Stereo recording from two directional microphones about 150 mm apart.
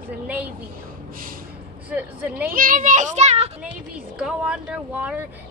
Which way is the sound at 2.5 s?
65° right (ahead or behind).